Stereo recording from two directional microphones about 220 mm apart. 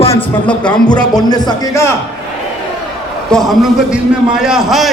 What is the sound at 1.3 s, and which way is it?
Speech, 20° left (ahead or behind).